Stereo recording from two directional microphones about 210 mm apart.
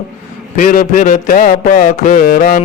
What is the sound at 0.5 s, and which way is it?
Mantra, 40° left (ahead or behind).